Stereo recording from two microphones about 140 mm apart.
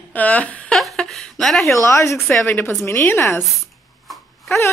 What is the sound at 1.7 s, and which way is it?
Speech, 20° left (ahead or behind).